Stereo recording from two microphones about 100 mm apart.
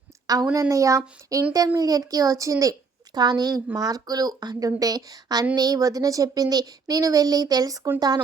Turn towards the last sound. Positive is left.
turn(degrees=-35)  # may be behind; listen again after turning